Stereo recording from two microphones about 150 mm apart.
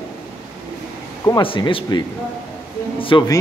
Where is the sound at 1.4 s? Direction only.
35° left (ahead or behind).